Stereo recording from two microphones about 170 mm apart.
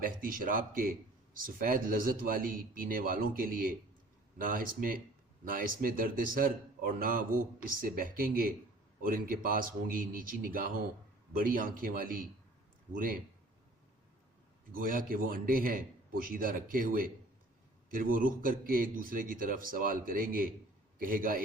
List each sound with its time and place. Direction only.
0.0 s a man's voice: 55° right (ahead or behind)
14.7 s a man's voice: 55° right (ahead or behind)